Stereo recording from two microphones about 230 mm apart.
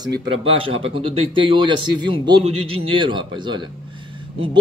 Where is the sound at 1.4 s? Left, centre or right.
Right.